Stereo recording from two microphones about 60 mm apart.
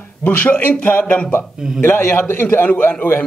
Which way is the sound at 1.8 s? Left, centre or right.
Left.